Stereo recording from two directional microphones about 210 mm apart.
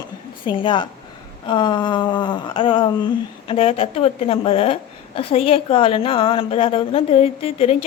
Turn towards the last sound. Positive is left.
turn(degrees=30)  # may be behind; listen again after turning